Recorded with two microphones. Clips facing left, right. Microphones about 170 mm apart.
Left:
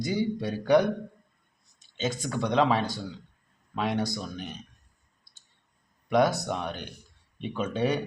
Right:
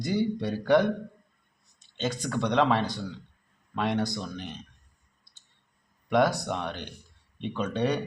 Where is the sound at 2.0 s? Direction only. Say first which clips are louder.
Even; centre (ahead or behind).